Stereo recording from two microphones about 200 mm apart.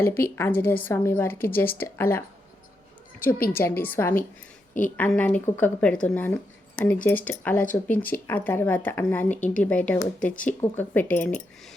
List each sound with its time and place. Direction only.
0.0 s a woman's voice: 10° left (ahead or behind)
7.6 s speech: 40° left (ahead or behind)
7.9 s speech: 10° left (ahead or behind)